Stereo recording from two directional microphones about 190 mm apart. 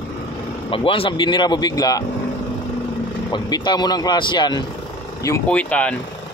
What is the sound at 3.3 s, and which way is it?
Speech, 20° left (ahead or behind).